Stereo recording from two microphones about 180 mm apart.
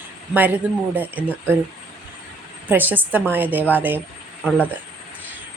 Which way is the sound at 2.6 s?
10° right (ahead or behind).